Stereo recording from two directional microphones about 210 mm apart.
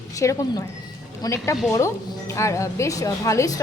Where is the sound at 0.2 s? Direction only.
15° left (ahead or behind).